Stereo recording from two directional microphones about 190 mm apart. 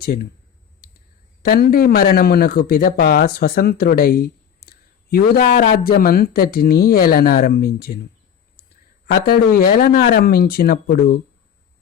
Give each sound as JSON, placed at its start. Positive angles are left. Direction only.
{"t": 0.0, "sound": "speech", "side_deg": 55}
{"t": 1.4, "sound": "a man's voice", "side_deg": 55}
{"t": 9.2, "sound": "a man's voice", "side_deg": 50}